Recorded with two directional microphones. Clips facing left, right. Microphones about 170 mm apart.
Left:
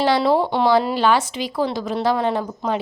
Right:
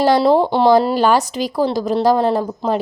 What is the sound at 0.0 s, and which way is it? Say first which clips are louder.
A woman's voice: right 4 dB; 40° right (ahead or behind).